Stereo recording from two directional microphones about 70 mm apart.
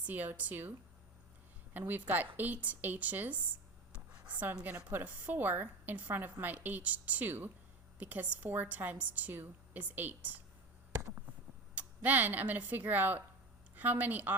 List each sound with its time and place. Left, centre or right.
0.0 s a woman's voice: right
1.7 s a woman's voice: right
11.7 s a woman's voice: right